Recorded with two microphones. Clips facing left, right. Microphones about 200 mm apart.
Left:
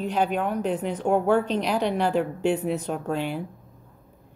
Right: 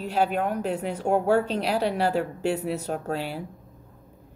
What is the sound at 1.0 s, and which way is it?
Speech, 45° right (ahead or behind).